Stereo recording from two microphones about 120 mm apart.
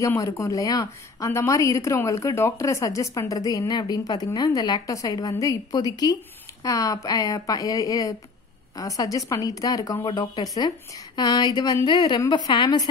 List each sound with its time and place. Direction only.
0.4 s a woman's voice: 30° left (ahead or behind)